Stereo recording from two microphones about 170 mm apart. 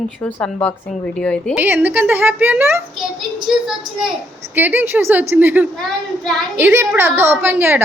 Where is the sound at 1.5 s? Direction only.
10° right (ahead or behind).